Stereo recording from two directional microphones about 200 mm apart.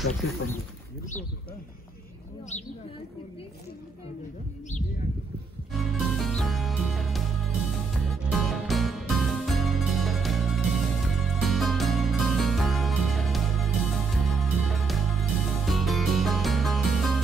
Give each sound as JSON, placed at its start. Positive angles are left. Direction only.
{"t": 2.5, "sound": "speech", "side_deg": 35}
{"t": 5.7, "sound": "music", "side_deg": 0}